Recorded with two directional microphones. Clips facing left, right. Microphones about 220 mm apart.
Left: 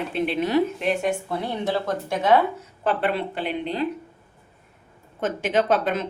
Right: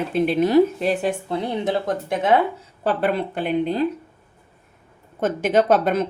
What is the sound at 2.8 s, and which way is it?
A woman's voice, 40° right (ahead or behind).